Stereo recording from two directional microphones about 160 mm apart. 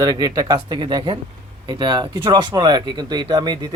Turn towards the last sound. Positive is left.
turn(degrees=-25)  # may be behind; listen again after turning